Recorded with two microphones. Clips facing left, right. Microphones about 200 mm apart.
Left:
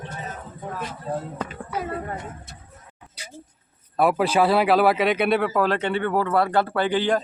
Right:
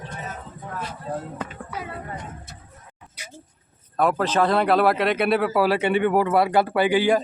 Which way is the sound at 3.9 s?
10° left (ahead or behind).